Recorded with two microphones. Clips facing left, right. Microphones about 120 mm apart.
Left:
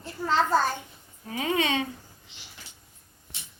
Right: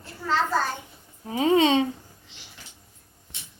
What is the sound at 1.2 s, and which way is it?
Speech, 25° right (ahead or behind).